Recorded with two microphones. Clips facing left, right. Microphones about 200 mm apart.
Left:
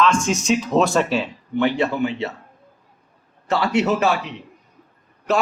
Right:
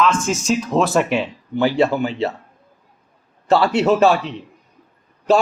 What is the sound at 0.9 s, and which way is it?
Speech, 15° right (ahead or behind).